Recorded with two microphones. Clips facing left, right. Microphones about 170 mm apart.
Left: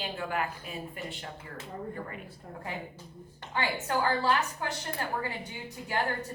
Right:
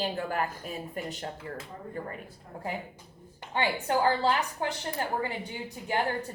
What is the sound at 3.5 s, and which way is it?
A woman's voice, 25° right (ahead or behind).